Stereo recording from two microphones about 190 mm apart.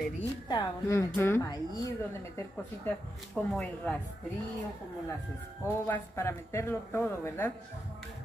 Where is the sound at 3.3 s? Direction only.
5° left (ahead or behind).